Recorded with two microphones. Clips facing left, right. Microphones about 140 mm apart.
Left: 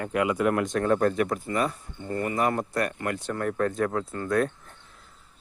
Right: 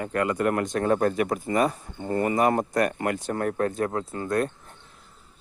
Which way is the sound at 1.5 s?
45° right (ahead or behind).